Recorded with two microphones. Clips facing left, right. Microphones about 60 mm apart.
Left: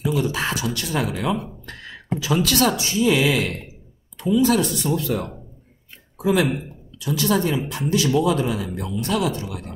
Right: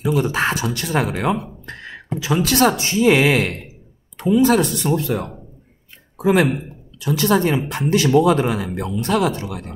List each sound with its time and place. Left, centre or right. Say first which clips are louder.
0.1 s speech: right 7 dB; right
1.7 s a sound: left 1 dB; right
2.5 s speech: right 4 dB; right